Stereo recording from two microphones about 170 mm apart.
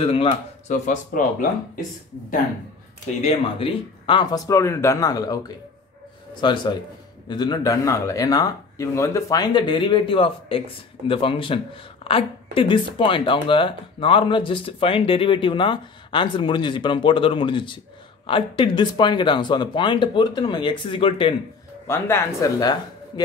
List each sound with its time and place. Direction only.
0.0 s speech: 35° left (ahead or behind)
3.2 s speech: 35° left (ahead or behind)
21.8 s speech: 15° left (ahead or behind)